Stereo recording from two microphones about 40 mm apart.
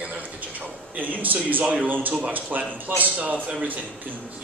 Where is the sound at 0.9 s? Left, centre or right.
Right.